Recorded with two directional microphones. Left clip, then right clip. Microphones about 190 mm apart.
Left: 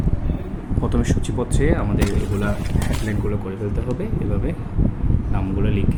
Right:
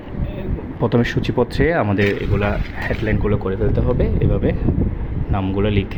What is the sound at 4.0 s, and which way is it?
Speech, 25° right (ahead or behind).